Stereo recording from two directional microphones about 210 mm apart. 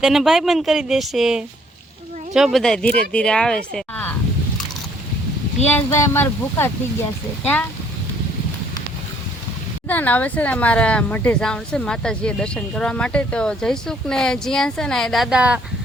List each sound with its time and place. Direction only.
0.0 s speech: centre (ahead or behind)
5.7 s speech: 10° left (ahead or behind)
9.9 s speech: 10° left (ahead or behind)